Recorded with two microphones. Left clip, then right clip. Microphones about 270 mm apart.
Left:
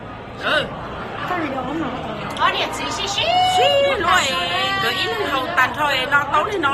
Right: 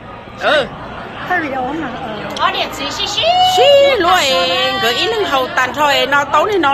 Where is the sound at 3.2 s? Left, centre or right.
Centre.